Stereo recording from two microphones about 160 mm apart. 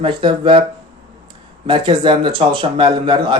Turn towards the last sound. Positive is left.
turn(degrees=-30)  # may be behind; listen again after turning